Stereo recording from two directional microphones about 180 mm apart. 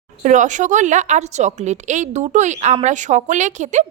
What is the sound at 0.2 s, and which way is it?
A woman's voice, 45° right (ahead or behind).